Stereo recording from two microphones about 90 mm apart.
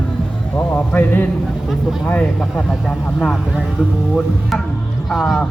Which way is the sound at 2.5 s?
5° left (ahead or behind).